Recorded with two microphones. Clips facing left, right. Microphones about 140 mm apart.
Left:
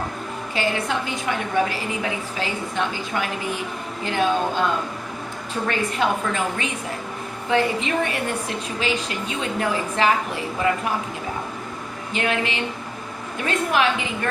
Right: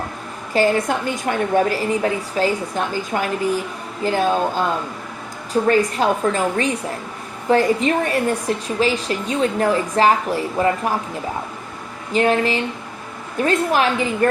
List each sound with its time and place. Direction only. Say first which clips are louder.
0.5 s a woman's voice: right 7 dB; 45° right (ahead or behind)
5.6 s a woman's voice: right 5 dB; 40° right (ahead or behind)
12.1 s a woman's voice: right 7 dB; 40° right (ahead or behind)